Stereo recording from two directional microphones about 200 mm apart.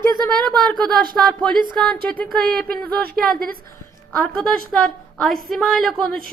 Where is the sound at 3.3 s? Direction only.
45° right (ahead or behind).